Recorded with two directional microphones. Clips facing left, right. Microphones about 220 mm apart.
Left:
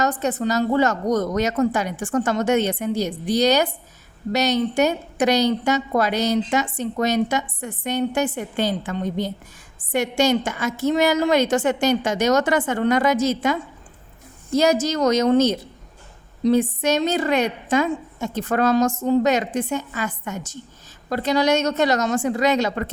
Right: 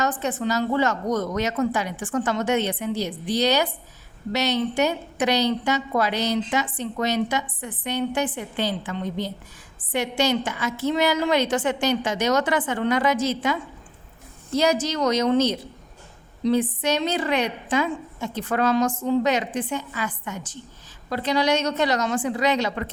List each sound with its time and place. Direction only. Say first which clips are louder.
0.0 s a woman's voice: left 3 dB; 40° left (ahead or behind)